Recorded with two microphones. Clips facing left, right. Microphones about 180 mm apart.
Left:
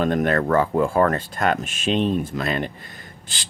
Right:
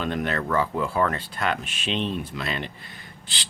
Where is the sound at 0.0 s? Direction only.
45° left (ahead or behind).